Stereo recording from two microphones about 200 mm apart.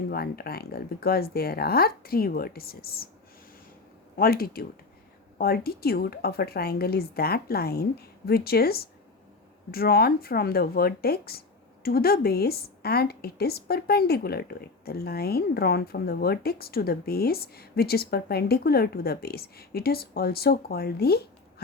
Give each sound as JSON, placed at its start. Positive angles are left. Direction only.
{"t": 0.1, "sound": "speech", "side_deg": 50}
{"t": 4.2, "sound": "speech", "side_deg": 50}